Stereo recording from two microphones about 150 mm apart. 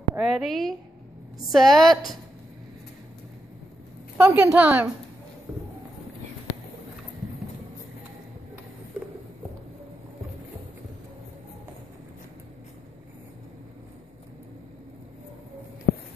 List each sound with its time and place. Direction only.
0.2 s a woman's voice: centre (ahead or behind)
4.2 s a woman's voice: 20° right (ahead or behind)
4.5 s a woman's voice: 10° right (ahead or behind)
15.9 s a sound: 90° left